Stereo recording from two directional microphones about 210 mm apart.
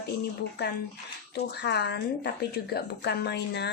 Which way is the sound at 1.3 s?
50° left (ahead or behind).